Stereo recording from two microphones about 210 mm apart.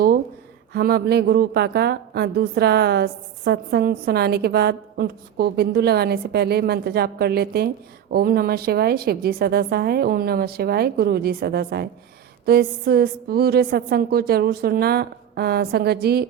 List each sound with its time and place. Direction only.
0.7 s a woman's voice: 50° right (ahead or behind)